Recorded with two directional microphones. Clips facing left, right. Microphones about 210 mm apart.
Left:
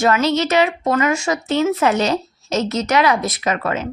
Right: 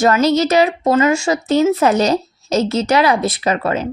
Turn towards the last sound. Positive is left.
turn(degrees=-35)  # may be behind; listen again after turning